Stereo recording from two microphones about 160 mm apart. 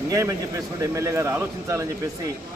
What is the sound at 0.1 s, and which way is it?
A man's voice, 20° right (ahead or behind).